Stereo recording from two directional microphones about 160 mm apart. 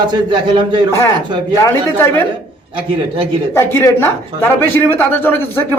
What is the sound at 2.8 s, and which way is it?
Speech, 35° right (ahead or behind).